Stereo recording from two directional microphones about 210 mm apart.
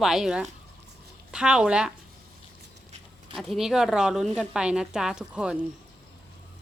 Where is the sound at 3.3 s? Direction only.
Centre (ahead or behind).